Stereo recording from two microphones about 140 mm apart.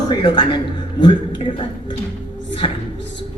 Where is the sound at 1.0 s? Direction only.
35° left (ahead or behind).